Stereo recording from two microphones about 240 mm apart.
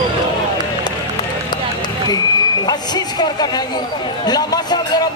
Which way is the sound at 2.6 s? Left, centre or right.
Centre.